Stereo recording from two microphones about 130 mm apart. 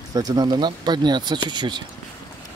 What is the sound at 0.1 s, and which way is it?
Speech, 30° right (ahead or behind).